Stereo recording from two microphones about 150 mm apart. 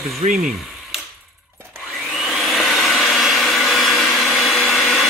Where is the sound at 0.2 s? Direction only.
45° right (ahead or behind).